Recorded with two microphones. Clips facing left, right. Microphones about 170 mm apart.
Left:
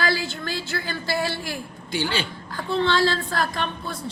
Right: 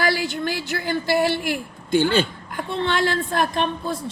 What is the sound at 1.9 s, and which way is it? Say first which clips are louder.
Speech: right 8 dB; 50° right (ahead or behind).